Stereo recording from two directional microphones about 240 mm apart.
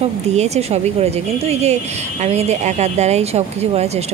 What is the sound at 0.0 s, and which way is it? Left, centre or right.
A woman's voice, right.